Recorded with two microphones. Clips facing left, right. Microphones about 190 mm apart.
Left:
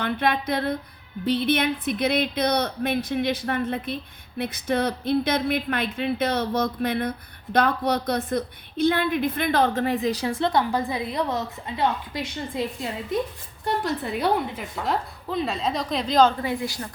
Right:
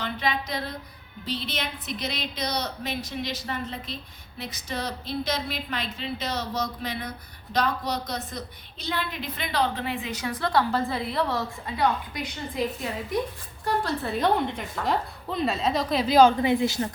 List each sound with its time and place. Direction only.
0.0 s a sound: 55° left (ahead or behind)
1.2 s a woman's voice: 55° left (ahead or behind); by 13.1 s 25° left (ahead or behind)
13.7 s a woman's voice: 15° left (ahead or behind); by 16.3 s 10° right (ahead or behind)
16.4 s speech: 20° right (ahead or behind)